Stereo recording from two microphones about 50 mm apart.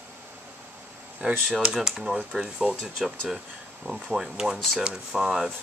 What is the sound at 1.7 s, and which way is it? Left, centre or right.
Speech, centre.